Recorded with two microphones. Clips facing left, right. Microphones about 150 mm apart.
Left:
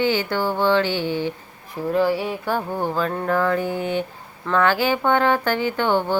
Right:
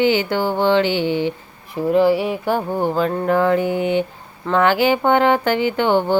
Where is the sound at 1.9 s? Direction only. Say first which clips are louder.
Right 5 dB; 15° right (ahead or behind).